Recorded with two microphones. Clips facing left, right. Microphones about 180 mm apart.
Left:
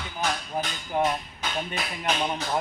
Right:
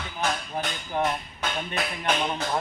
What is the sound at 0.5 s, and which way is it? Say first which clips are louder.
Speech: left 1 dB; 10° left (ahead or behind).